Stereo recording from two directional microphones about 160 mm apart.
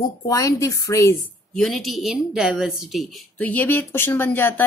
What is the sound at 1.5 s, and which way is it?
A woman's voice, centre (ahead or behind).